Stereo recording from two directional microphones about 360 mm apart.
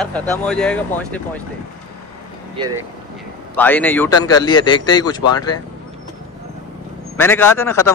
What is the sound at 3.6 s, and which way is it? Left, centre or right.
A man's voice, centre.